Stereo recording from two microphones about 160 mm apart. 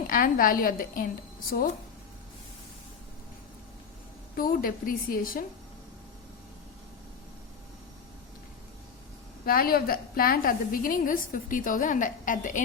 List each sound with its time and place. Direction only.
0.1 s a woman's voice: 60° left (ahead or behind)
4.4 s a woman's voice: 65° left (ahead or behind)
9.5 s a woman's voice: 65° left (ahead or behind)